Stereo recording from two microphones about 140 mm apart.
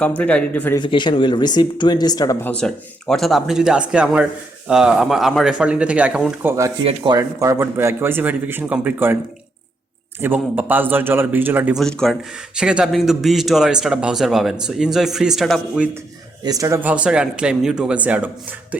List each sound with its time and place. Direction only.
0.2 s speech: 10° left (ahead or behind)
0.8 s speech: 35° left (ahead or behind)
2.4 s a man's voice: 5° left (ahead or behind); by 6.5 s 10° right (ahead or behind)
6.8 s speech: 40° right (ahead or behind)
7.2 s a man's voice: 25° right (ahead or behind)
10.2 s a man's voice: 15° right (ahead or behind)
11.8 s a man's voice: 5° left (ahead or behind)
16.4 s speech: 25° right (ahead or behind)
16.9 s a man's voice: 10° right (ahead or behind)